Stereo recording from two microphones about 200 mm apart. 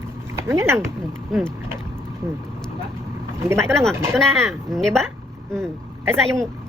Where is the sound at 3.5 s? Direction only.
10° right (ahead or behind).